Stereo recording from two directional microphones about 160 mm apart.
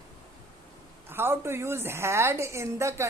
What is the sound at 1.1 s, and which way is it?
A woman's voice, 15° right (ahead or behind).